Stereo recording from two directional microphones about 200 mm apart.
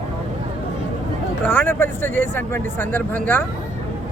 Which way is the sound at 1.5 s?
10° left (ahead or behind).